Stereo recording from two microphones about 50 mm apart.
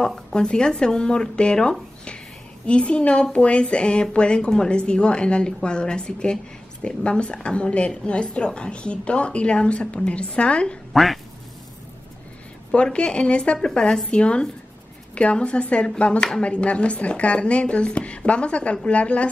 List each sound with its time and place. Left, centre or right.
0.0 s a woman's voice: centre
10.9 s quack: centre
12.7 s a woman's voice: left